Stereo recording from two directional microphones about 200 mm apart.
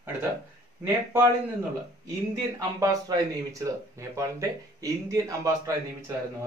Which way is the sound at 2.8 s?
15° right (ahead or behind).